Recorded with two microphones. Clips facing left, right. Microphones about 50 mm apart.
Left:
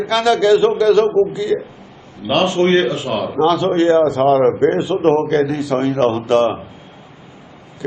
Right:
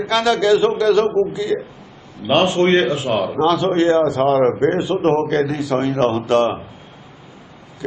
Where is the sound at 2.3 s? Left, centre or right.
Centre.